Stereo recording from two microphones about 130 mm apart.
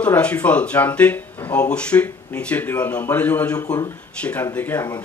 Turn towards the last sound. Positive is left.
turn(degrees=15)  # may be behind; listen again after turning